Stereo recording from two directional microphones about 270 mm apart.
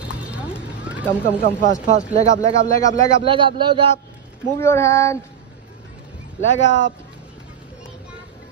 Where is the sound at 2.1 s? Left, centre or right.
Right.